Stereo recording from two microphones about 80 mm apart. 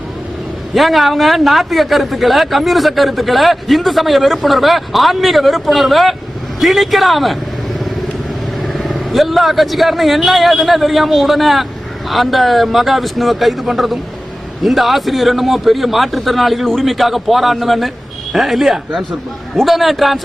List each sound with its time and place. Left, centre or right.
0.7 s a man's voice: centre
8.6 s a man's voice: centre